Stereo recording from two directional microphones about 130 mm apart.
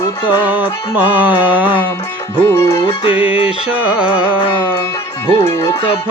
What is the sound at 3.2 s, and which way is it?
Music, 45° left (ahead or behind).